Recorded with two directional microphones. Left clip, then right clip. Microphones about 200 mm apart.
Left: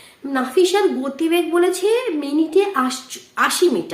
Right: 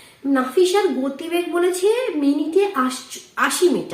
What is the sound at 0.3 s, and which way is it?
A woman's voice, 55° left (ahead or behind).